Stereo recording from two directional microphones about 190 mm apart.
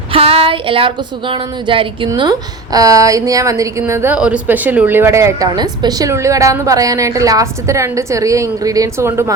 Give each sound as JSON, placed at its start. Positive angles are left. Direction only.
{"t": 0.1, "sound": "a woman's voice", "side_deg": -30}